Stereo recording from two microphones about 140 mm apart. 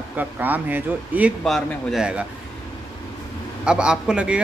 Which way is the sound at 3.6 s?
5° right (ahead or behind).